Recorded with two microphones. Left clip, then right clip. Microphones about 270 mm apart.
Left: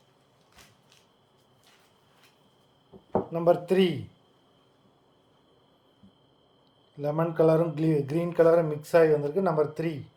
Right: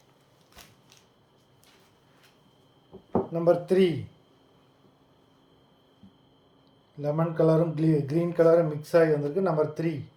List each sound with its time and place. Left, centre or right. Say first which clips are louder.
3.1 s speech: even; centre
7.0 s speech: left 1 dB; centre